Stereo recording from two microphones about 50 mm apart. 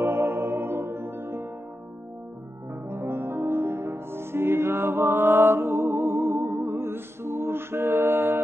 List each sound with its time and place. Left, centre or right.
0.0 s music: right
2.9 s music: right
7.9 s mantra: right